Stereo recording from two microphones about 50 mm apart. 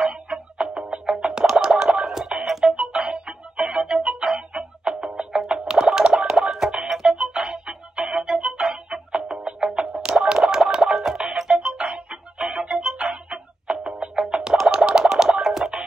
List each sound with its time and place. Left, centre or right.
0.0 s music: centre